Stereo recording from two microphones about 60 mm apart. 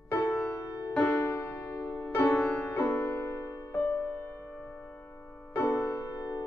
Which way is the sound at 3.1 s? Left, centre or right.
Left.